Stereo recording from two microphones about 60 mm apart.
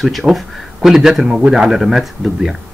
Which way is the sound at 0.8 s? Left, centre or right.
Centre.